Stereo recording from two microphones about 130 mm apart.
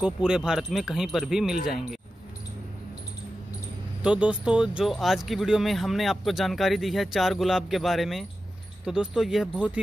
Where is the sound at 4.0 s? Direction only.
10° right (ahead or behind).